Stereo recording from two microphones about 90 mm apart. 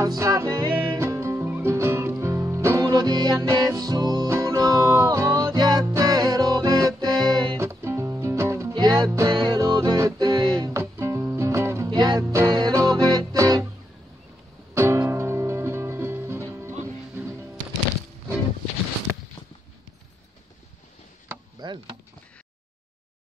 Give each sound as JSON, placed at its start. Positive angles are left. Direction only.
{"t": 0.0, "sound": "music", "side_deg": -40}
{"t": 5.5, "sound": "music", "side_deg": -50}
{"t": 7.2, "sound": "music", "side_deg": -55}
{"t": 7.5, "sound": "music", "side_deg": -30}
{"t": 8.7, "sound": "music", "side_deg": -50}
{"t": 9.8, "sound": "music", "side_deg": -35}
{"t": 10.7, "sound": "music", "side_deg": -30}
{"t": 11.9, "sound": "music", "side_deg": -50}
{"t": 12.3, "sound": "music", "side_deg": -35}
{"t": 14.7, "sound": "music", "side_deg": -30}